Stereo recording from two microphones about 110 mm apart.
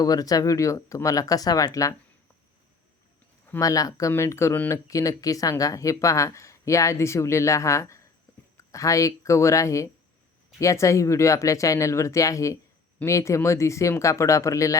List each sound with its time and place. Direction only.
0.0 s speech: 35° left (ahead or behind)
3.6 s speech: 30° left (ahead or behind)